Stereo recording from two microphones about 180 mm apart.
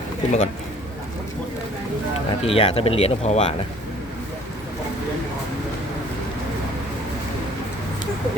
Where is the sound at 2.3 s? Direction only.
30° left (ahead or behind).